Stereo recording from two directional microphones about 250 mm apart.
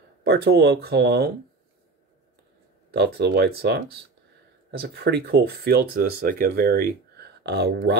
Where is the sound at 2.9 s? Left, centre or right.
Right.